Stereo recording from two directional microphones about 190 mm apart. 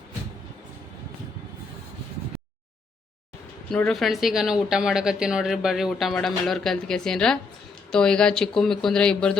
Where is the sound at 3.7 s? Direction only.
5° left (ahead or behind).